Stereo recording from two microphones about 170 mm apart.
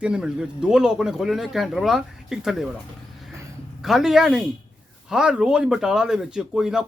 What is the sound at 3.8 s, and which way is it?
Speech, centre (ahead or behind).